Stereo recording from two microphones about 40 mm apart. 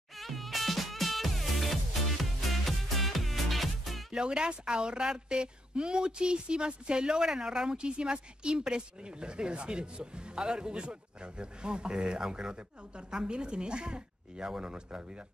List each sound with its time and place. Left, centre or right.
0.2 s music: centre
4.1 s speech: right